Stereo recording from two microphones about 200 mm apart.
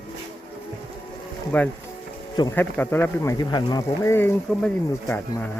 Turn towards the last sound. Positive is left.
turn(degrees=10)  # may be behind; listen again after turning